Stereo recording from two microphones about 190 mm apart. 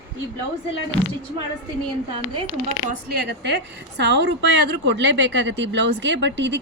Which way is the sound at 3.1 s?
60° right (ahead or behind).